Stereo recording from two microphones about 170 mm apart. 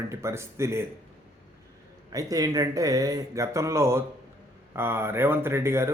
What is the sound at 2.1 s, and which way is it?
Speech, 20° right (ahead or behind).